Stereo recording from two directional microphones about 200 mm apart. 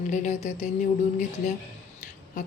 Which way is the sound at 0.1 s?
35° left (ahead or behind).